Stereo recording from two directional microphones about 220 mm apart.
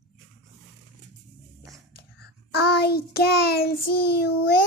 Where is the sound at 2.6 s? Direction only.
45° left (ahead or behind).